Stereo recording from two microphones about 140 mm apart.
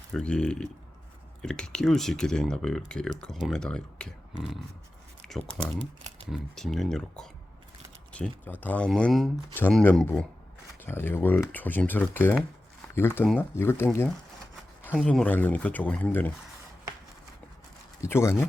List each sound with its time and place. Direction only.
0.1 s speech: 5° left (ahead or behind)
5.3 s speech: 5° left (ahead or behind)
9.5 s speech: 15° left (ahead or behind)
9.7 s speech: 5° left (ahead or behind)
10.8 s speech: 15° left (ahead or behind)
14.8 s speech: 5° left (ahead or behind)
18.0 s speech: 20° left (ahead or behind)